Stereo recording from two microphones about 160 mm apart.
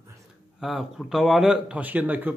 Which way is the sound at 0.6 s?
Centre (ahead or behind).